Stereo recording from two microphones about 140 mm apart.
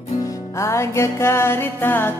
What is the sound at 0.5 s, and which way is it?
Music, 20° left (ahead or behind).